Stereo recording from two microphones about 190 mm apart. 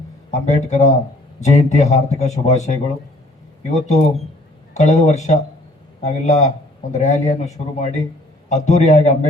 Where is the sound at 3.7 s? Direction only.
35° left (ahead or behind).